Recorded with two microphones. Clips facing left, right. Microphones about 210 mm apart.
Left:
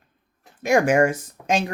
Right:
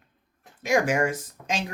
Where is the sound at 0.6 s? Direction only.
55° left (ahead or behind).